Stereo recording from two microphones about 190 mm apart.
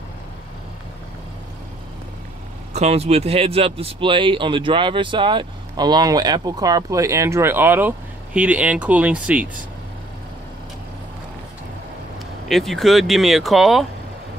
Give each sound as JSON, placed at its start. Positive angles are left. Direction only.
{"t": 2.7, "sound": "speech", "side_deg": -35}
{"t": 12.4, "sound": "speech", "side_deg": 0}